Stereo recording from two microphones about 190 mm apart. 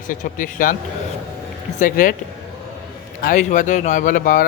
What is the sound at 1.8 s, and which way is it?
Speech, 45° left (ahead or behind).